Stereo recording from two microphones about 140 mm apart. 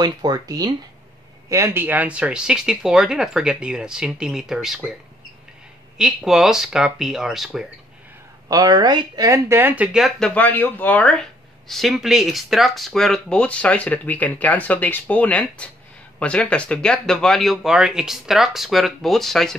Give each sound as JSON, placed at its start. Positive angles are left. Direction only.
{"t": 0.0, "sound": "speech", "side_deg": -30}
{"t": 1.5, "sound": "speech", "side_deg": -15}
{"t": 5.9, "sound": "speech", "side_deg": -5}
{"t": 8.5, "sound": "speech", "side_deg": -25}